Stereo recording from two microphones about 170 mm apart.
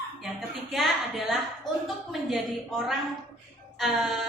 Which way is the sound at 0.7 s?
Centre (ahead or behind).